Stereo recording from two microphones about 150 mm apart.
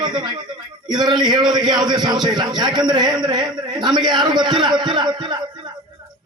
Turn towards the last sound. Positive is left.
turn(degrees=-30)  # may be behind; listen again after turning